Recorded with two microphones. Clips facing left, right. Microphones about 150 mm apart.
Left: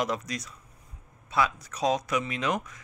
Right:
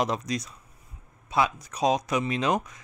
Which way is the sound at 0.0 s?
25° right (ahead or behind).